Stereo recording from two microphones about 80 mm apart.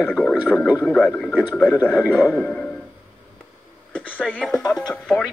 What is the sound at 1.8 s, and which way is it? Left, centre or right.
Speech, centre.